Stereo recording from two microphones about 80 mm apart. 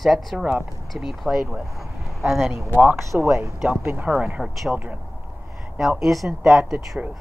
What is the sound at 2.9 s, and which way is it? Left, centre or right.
Speech, right.